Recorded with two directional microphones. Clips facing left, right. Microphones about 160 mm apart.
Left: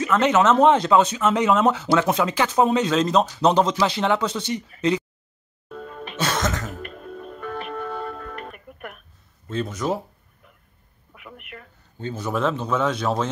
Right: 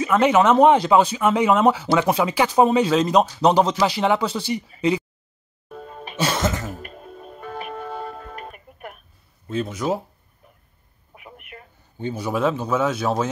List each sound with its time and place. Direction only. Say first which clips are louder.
0.0 s speech: right 2 dB; 10° right (ahead or behind)
5.8 s music: left 2 dB; 35° right (ahead or behind)
6.1 s music: right 2 dB; 10° right (ahead or behind)
8.5 s music: left 1 dB; 55° left (ahead or behind)
9.5 s speech: right 1 dB; 10° right (ahead or behind)
11.1 s a sound: left 1 dB; 40° right (ahead or behind)
12.0 s speech: right 2 dB; 10° right (ahead or behind)